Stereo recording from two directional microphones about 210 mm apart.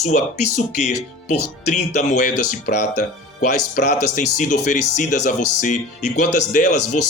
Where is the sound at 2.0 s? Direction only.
35° left (ahead or behind).